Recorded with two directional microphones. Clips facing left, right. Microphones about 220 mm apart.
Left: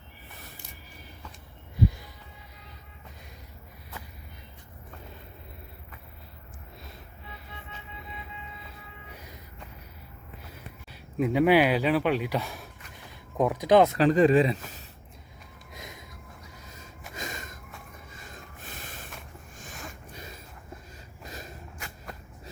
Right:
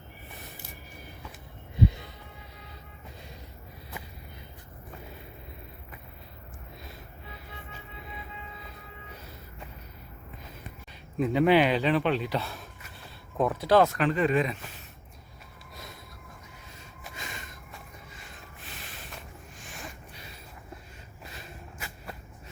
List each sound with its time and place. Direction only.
1.8 s music: 25° right (ahead or behind)
11.2 s speech: 10° left (ahead or behind)
14.0 s speech: 35° left (ahead or behind)
17.2 s a sound: 45° left (ahead or behind)
18.8 s snort: 45° left (ahead or behind)
21.2 s snort: 40° left (ahead or behind)
21.8 s a sound: 5° right (ahead or behind)